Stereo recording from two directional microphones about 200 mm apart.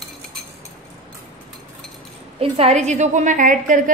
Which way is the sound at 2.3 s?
30° right (ahead or behind).